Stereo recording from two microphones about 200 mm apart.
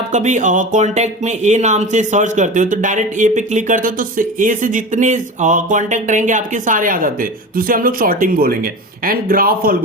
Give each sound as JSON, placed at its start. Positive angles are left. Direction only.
{"t": 0.1, "sound": "speech", "side_deg": -35}